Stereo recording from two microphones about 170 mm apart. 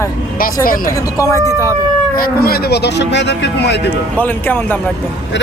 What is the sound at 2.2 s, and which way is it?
Speech, 65° left (ahead or behind).